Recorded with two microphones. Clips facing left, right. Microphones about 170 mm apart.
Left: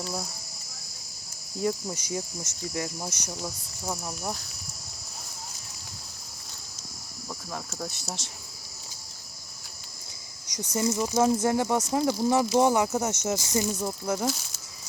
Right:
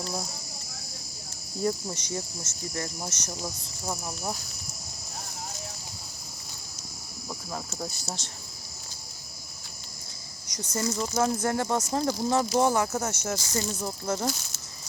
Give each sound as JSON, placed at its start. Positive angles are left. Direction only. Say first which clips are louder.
{"t": 0.0, "sound": "cricket", "louder": "even", "side_deg": 0}
{"t": 1.6, "sound": "speech", "louder": "even", "side_deg": 10}
{"t": 3.4, "sound": "cricket", "louder": "left 1 dB", "side_deg": -5}
{"t": 7.3, "sound": "speech", "louder": "right 1 dB", "side_deg": -10}
{"t": 8.0, "sound": "speech", "louder": "even", "side_deg": 10}
{"t": 10.4, "sound": "speech", "louder": "left 3 dB", "side_deg": 15}
{"t": 11.9, "sound": "cricket", "louder": "left 2 dB", "side_deg": 0}
{"t": 12.3, "sound": "speech", "louder": "left 2 dB", "side_deg": 15}